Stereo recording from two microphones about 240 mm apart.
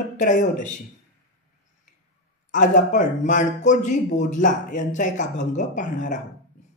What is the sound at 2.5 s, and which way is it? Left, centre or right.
Speech, left.